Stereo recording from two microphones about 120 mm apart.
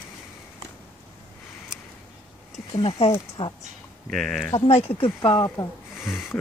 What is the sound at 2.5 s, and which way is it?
Speech, 55° left (ahead or behind).